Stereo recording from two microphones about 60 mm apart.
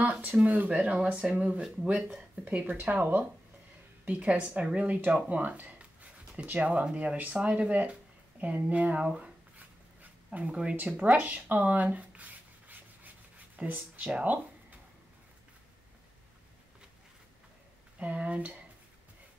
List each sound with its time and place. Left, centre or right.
0.0 s speech: right
2.4 s speech: right
4.0 s speech: right
10.3 s speech: right
11.1 s writing: right
13.6 s speech: right
17.9 s speech: right